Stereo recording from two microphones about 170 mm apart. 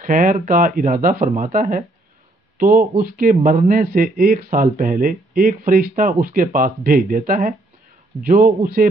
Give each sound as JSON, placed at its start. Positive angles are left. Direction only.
{"t": 0.0, "sound": "speech", "side_deg": -50}